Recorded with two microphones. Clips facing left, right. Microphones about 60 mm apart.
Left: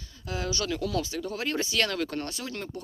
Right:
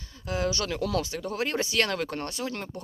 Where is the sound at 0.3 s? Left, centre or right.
Right.